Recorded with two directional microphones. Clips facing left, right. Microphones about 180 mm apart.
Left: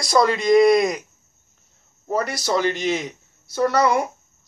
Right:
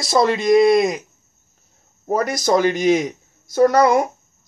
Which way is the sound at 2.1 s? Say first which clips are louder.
Right 4 dB; 45° right (ahead or behind).